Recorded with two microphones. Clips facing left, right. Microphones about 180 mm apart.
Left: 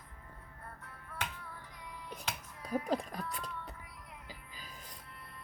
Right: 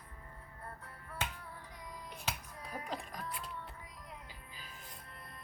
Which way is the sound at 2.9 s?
40° left (ahead or behind).